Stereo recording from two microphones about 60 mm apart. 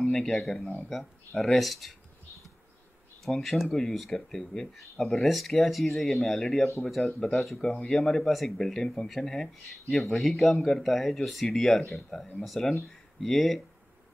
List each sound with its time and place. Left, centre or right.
0.1 s speech: centre
3.3 s speech: centre